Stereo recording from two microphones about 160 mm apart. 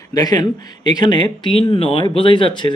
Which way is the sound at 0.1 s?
25° left (ahead or behind).